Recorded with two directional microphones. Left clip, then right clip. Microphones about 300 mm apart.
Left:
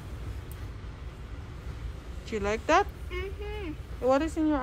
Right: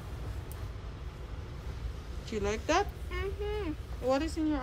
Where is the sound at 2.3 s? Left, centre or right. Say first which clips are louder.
Left 5 dB; centre.